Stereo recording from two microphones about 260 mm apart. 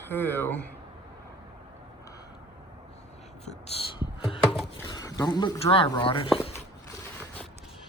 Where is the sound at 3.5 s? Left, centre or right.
Left.